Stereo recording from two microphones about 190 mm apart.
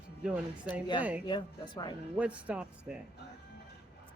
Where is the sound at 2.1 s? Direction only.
5° right (ahead or behind).